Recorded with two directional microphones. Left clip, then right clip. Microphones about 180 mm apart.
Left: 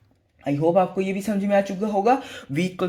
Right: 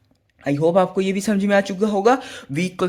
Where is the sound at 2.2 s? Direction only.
20° right (ahead or behind).